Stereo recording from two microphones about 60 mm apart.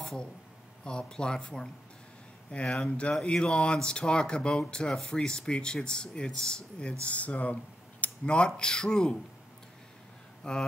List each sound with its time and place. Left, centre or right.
0.8 s speech: centre
10.4 s speech: centre